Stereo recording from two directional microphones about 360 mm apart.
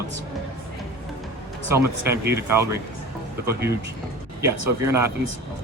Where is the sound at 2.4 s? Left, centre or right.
Centre.